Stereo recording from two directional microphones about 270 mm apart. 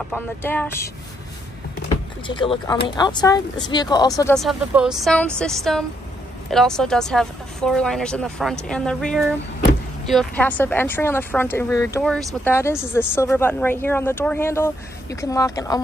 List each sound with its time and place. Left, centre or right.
0.1 s speech: centre
2.2 s speech: centre
4.2 s speech: centre